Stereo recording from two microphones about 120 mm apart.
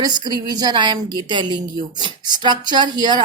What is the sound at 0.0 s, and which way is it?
A woman's voice, 35° right (ahead or behind).